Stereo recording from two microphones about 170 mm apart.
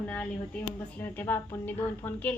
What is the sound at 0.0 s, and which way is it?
A woman's voice, 5° left (ahead or behind).